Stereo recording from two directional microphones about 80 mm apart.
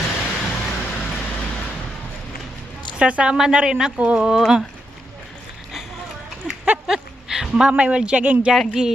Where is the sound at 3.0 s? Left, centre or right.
Centre.